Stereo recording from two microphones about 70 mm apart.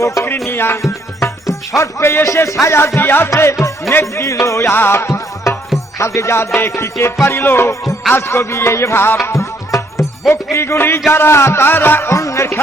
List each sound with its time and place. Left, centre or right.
0.0 s music: left
0.4 s music: left
0.9 s music: left
3.2 s speech: left
4.7 s music: left
12.1 s speech: left